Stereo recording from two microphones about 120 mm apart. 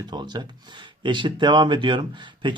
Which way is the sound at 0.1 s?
40° right (ahead or behind).